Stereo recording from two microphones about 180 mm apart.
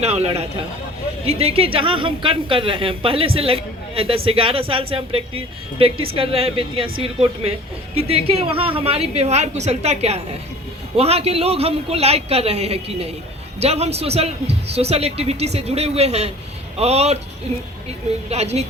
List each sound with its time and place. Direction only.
0.0 s a woman's voice: 35° right (ahead or behind)